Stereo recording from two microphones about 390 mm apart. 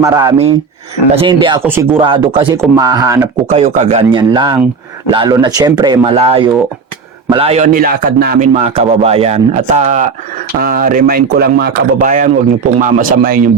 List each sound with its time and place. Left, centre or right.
0.0 s speech: centre